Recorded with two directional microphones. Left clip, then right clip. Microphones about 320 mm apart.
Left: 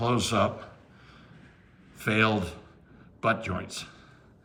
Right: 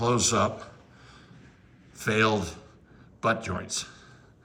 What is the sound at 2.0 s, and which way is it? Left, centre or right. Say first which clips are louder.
A man's voice: right 1 dB; centre.